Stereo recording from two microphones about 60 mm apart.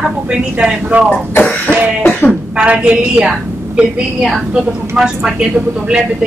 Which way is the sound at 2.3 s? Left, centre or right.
Centre.